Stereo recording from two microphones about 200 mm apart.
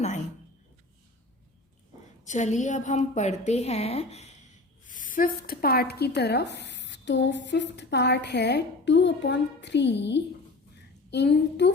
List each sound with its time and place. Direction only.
2.2 s a woman's voice: 35° left (ahead or behind); by 11.7 s 60° left (ahead or behind)